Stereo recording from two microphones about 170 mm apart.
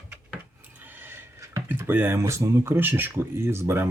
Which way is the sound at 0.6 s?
10° right (ahead or behind).